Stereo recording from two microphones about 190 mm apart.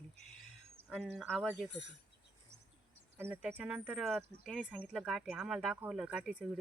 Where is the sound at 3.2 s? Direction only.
10° right (ahead or behind).